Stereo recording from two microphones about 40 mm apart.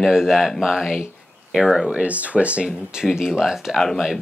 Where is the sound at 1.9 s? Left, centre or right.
Right.